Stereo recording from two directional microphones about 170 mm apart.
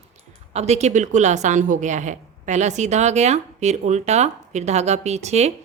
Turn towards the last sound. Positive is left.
turn(degrees=-40)  # may be behind; listen again after turning